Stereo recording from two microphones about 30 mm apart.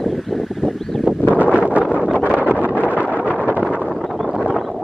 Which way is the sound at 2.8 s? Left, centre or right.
Right.